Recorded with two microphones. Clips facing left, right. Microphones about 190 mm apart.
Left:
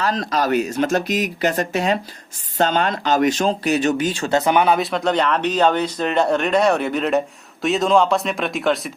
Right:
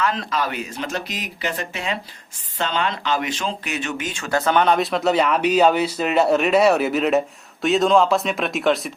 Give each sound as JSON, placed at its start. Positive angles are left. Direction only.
{"t": 0.0, "sound": "speech", "side_deg": 40}
{"t": 4.3, "sound": "speech", "side_deg": 15}